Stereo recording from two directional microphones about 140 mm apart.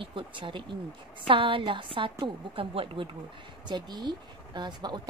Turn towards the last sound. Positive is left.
turn(degrees=-30)  # may be behind; listen again after turning